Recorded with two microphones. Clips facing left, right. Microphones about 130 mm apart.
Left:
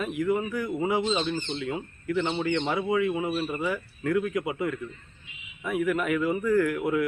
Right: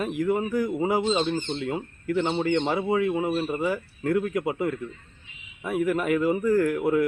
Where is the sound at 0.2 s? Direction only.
40° right (ahead or behind).